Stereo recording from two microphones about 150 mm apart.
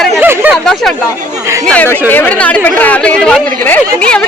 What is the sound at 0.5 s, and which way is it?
Speech, centre (ahead or behind).